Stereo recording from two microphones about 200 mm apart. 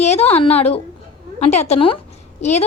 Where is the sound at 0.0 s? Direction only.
30° left (ahead or behind).